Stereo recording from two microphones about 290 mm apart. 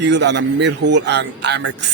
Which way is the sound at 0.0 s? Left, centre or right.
Right.